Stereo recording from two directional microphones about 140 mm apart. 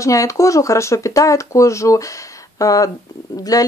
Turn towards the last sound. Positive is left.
turn(degrees=25)  # may be behind; listen again after turning